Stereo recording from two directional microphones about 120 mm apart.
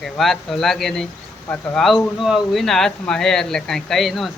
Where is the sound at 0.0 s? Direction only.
Centre (ahead or behind).